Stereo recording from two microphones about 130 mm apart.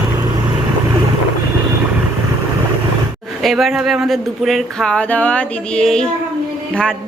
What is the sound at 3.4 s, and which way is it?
A woman's voice, centre (ahead or behind).